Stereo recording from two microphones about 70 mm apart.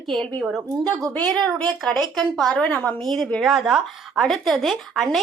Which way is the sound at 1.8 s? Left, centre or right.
Centre.